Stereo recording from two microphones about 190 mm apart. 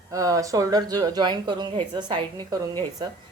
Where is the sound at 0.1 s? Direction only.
15° right (ahead or behind).